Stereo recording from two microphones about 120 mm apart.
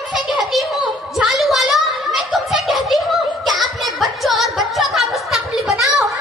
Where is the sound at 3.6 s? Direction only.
Centre (ahead or behind).